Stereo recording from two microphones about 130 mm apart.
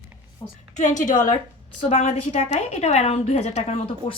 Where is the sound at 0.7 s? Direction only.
70° left (ahead or behind).